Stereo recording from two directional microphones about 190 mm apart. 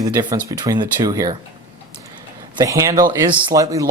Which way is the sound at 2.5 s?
15° right (ahead or behind).